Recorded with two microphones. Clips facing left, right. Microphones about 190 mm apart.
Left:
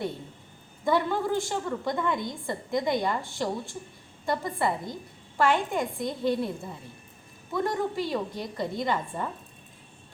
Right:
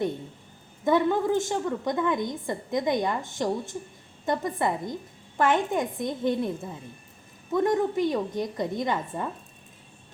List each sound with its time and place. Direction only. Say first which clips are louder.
0.9 s a woman's voice: right 3 dB; 20° right (ahead or behind)
7.5 s a woman's voice: right 5 dB; 20° right (ahead or behind)